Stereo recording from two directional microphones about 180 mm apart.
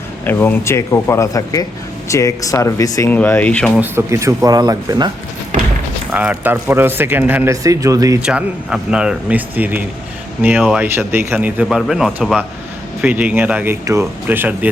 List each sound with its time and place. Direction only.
0.3 s speech: 10° left (ahead or behind)
3.8 s speech: 15° right (ahead or behind)
6.1 s speech: 10° right (ahead or behind)
8.2 s speech: 5° right (ahead or behind)